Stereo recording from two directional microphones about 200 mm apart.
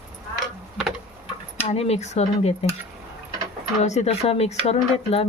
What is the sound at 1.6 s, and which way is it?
Speech, 30° left (ahead or behind).